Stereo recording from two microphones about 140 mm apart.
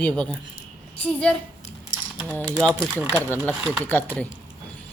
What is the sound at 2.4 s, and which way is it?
Speech, 5° left (ahead or behind).